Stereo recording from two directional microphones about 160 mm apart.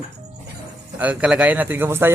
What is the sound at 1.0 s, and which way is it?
Speech, 10° right (ahead or behind).